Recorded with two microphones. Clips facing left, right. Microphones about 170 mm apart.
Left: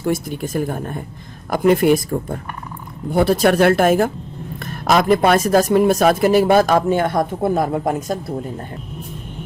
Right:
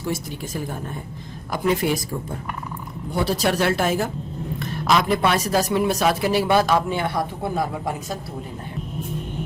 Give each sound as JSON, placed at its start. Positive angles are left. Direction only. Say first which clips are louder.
{"t": 0.0, "sound": "speech", "louder": "left 7 dB", "side_deg": 55}